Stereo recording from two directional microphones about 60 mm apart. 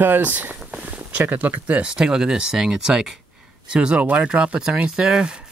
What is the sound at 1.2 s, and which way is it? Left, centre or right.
Speech, right.